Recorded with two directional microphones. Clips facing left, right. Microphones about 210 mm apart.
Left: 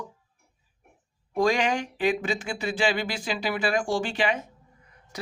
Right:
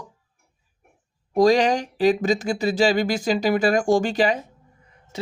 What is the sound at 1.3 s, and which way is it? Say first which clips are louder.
Speech: right 7 dB; 35° right (ahead or behind).